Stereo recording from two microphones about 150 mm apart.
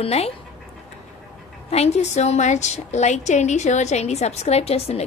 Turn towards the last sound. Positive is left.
turn(degrees=45)  # may be behind; listen again after turning